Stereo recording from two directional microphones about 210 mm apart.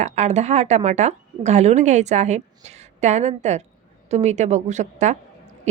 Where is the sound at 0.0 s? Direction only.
35° right (ahead or behind).